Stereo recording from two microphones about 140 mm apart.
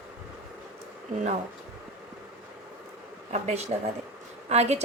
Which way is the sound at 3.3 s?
50° right (ahead or behind).